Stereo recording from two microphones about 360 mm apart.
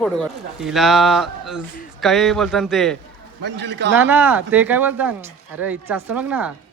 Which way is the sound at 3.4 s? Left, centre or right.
Right.